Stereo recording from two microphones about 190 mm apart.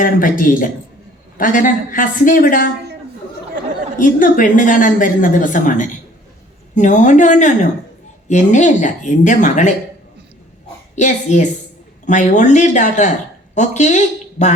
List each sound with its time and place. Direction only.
0.0 s a woman's voice: 45° left (ahead or behind)
3.9 s a woman's voice: 45° left (ahead or behind)
10.9 s speech: 40° left (ahead or behind)